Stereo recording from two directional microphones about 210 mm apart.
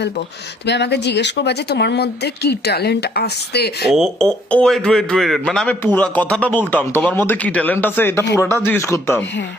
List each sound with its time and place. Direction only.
0.6 s speech: 55° left (ahead or behind)
3.8 s speech: centre (ahead or behind)